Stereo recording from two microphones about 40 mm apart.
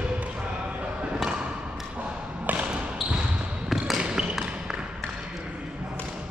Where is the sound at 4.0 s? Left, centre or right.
Right.